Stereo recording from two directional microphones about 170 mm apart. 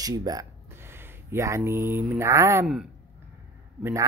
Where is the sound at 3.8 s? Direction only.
20° right (ahead or behind).